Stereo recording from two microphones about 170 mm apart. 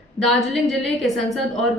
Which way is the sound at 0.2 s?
Centre (ahead or behind).